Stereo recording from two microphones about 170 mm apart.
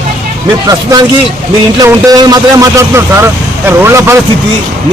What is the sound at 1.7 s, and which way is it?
A man's voice, 20° right (ahead or behind).